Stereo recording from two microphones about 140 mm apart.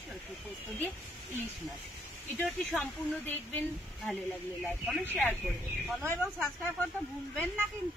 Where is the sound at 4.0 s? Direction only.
Centre (ahead or behind).